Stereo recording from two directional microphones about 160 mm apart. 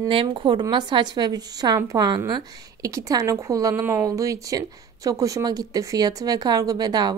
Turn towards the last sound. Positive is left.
turn(degrees=-25)  # may be behind; listen again after turning